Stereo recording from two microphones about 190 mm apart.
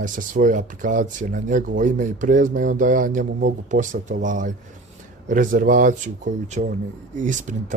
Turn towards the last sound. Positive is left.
turn(degrees=-40)  # may be behind; listen again after turning